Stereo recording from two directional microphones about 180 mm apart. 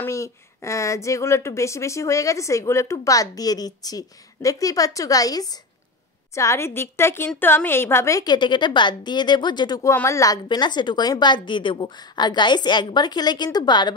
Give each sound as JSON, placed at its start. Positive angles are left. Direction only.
{"t": 0.0, "sound": "a woman's voice", "side_deg": 15}